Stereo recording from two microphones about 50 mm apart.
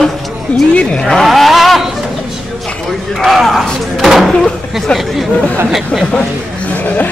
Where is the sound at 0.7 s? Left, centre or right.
Left.